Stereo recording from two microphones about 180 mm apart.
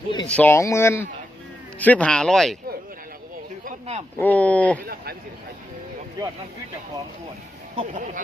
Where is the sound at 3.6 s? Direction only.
35° right (ahead or behind).